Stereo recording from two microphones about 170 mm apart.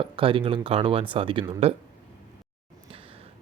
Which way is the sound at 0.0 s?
30° right (ahead or behind).